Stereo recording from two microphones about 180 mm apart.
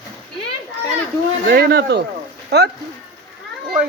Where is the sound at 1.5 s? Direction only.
60° right (ahead or behind).